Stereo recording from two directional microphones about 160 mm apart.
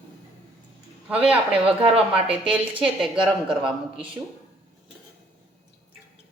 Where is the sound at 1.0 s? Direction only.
5° right (ahead or behind).